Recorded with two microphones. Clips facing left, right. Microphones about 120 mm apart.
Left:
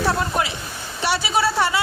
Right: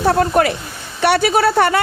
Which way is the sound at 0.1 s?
55° right (ahead or behind).